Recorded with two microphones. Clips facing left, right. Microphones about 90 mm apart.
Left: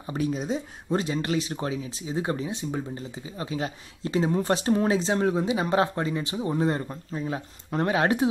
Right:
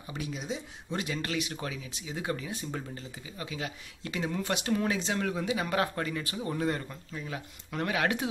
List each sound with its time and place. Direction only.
0.0 s speech: 40° left (ahead or behind)